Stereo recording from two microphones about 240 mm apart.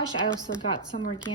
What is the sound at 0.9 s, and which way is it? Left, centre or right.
Speech, left.